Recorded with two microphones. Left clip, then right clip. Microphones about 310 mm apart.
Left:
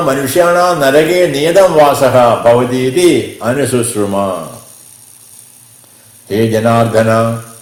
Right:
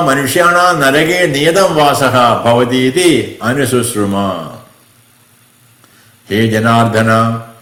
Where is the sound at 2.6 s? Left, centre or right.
Centre.